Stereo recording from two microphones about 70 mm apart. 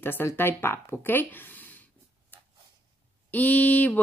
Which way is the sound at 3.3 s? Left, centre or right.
Left.